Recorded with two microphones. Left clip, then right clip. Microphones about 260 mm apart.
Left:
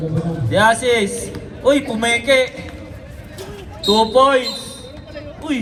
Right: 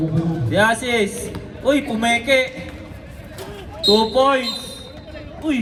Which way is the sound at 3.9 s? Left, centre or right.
Left.